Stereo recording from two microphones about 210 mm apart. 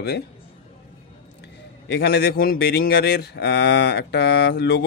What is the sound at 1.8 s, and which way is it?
A man's voice, 50° left (ahead or behind).